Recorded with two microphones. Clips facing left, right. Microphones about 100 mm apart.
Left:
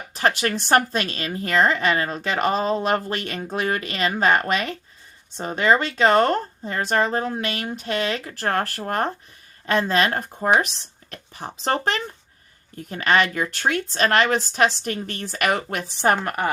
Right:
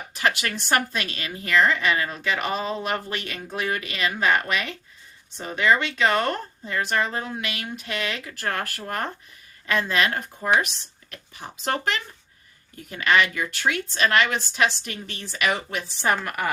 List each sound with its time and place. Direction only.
0.1 s a woman's voice: 35° left (ahead or behind)
16.1 s a woman's voice: 30° left (ahead or behind)